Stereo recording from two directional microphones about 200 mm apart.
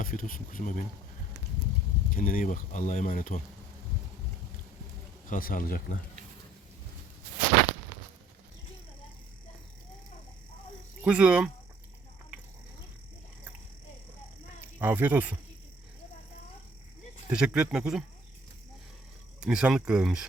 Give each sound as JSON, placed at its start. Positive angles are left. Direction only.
{"t": 0.0, "sound": "speech", "side_deg": 45}
{"t": 2.0, "sound": "speech", "side_deg": 45}
{"t": 5.3, "sound": "speech", "side_deg": 45}
{"t": 11.0, "sound": "speech", "side_deg": -5}
{"t": 14.8, "sound": "speech", "side_deg": -10}
{"t": 17.2, "sound": "speech", "side_deg": -5}
{"t": 19.4, "sound": "speech", "side_deg": -5}